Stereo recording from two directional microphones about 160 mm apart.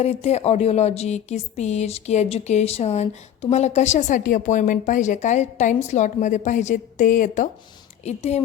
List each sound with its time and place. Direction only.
0.0 s speech: 40° left (ahead or behind)
8.0 s speech: 45° left (ahead or behind)